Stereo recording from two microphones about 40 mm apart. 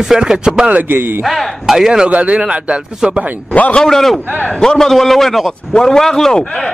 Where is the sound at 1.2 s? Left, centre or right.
Centre.